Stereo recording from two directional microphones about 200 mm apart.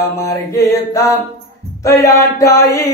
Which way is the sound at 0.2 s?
15° left (ahead or behind).